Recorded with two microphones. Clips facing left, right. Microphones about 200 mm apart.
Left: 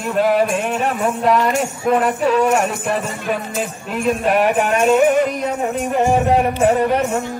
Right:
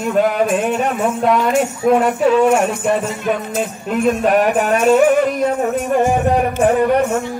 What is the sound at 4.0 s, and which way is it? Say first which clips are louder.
Speech: right 2 dB; 40° right (ahead or behind).